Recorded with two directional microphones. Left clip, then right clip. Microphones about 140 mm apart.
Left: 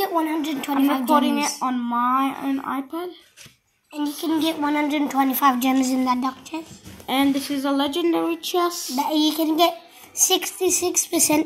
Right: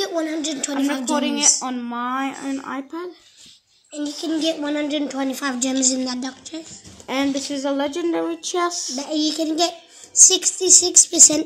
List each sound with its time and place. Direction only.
0.0 s a woman's voice: 15° left (ahead or behind)
4.7 s a child's voice: 30° left (ahead or behind)